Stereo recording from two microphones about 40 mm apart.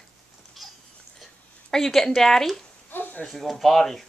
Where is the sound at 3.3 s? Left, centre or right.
Centre.